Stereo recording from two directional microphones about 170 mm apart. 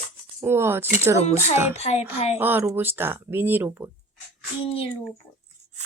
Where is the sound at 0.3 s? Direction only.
15° right (ahead or behind).